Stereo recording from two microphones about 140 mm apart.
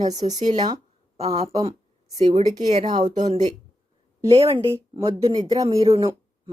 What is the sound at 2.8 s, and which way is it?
Speech, 35° right (ahead or behind).